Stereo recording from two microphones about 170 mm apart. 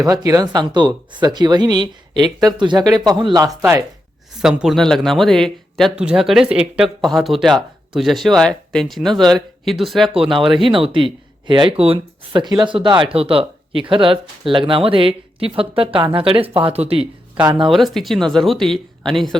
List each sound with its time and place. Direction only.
0.3 s speech: 20° right (ahead or behind)
3.6 s speech: 15° right (ahead or behind)
4.4 s speech: 5° right (ahead or behind)
10.6 s speech: 30° right (ahead or behind)
17.7 s speech: centre (ahead or behind)